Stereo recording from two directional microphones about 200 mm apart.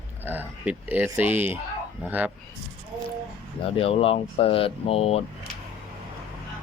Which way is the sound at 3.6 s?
30° left (ahead or behind).